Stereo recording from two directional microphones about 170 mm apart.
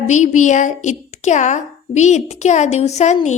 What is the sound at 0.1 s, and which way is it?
A woman's voice, 45° left (ahead or behind).